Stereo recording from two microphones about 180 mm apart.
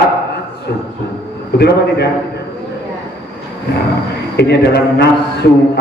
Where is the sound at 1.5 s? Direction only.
65° left (ahead or behind).